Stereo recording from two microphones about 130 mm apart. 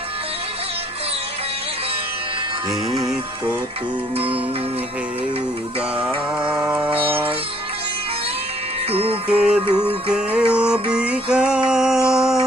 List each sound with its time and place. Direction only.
6.5 s music: 10° right (ahead or behind)
8.9 s music: 50° right (ahead or behind)
9.3 s music: 10° right (ahead or behind)